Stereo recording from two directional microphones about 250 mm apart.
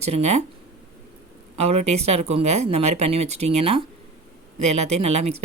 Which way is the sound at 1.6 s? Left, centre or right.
Right.